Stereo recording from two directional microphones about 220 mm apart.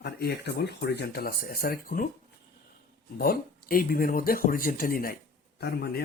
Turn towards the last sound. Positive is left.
turn(degrees=45)  # may be behind; listen again after turning